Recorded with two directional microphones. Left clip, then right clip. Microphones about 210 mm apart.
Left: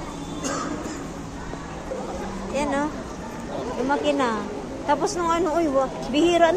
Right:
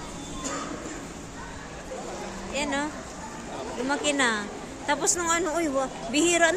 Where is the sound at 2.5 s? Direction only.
10° right (ahead or behind).